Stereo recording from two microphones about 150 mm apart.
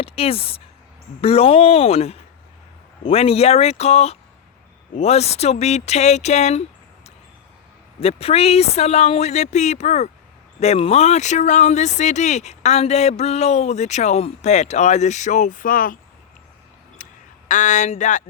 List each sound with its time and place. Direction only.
0.0 s speech: 40° left (ahead or behind); by 16.0 s 65° left (ahead or behind)
17.0 s duck: 60° left (ahead or behind)
17.5 s speech: 55° left (ahead or behind)